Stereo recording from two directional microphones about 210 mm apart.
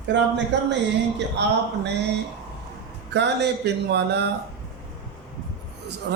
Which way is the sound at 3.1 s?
55° right (ahead or behind).